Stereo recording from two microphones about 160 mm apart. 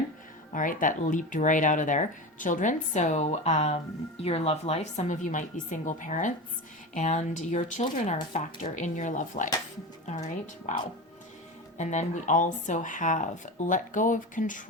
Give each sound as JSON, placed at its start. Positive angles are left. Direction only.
{"t": 0.5, "sound": "speech", "side_deg": 55}
{"t": 11.8, "sound": "speech", "side_deg": 50}